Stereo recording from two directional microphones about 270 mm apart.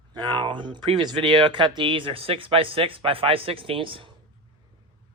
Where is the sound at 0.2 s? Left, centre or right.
Centre.